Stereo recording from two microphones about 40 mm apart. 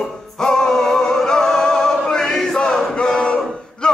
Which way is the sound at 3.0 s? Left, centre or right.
Left.